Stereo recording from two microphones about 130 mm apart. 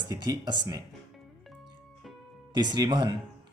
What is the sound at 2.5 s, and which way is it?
Speech, 35° right (ahead or behind).